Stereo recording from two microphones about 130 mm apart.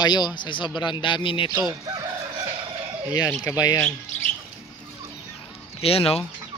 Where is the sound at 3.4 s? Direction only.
25° left (ahead or behind).